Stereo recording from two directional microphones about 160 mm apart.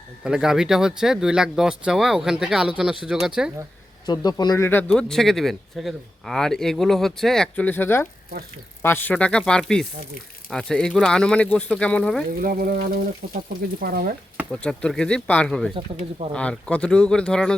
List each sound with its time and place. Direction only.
0.3 s speech: 5° right (ahead or behind)
4.0 s speech: 25° left (ahead or behind); by 12.2 s 5° left (ahead or behind)
12.4 s frying: 65° right (ahead or behind)
13.3 s speech: 65° right (ahead or behind)
14.5 s speech: 5° left (ahead or behind)